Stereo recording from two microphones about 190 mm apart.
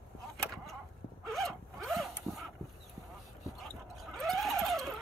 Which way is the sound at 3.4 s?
Centre (ahead or behind).